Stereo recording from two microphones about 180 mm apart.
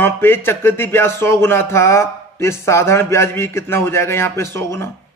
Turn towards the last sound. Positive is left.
turn(degrees=15)  # may be behind; listen again after turning